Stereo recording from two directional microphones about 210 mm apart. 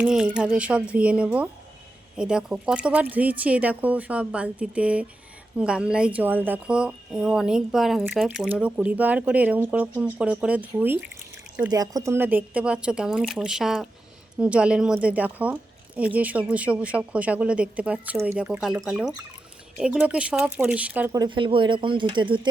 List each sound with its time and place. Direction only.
0.0 s a woman's voice: 5° right (ahead or behind); by 22.4 s 25° right (ahead or behind)